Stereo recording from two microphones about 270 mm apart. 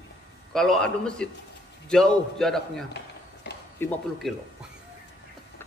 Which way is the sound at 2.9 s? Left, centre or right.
Left.